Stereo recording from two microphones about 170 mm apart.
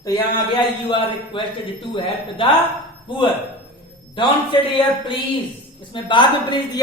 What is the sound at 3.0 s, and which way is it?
A woman's voice, 30° left (ahead or behind).